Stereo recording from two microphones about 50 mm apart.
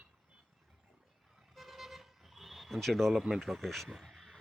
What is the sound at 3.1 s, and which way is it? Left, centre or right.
Speech, centre.